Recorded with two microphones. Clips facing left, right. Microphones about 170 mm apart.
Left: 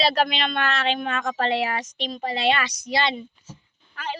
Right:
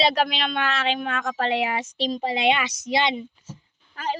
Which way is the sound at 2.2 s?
15° right (ahead or behind).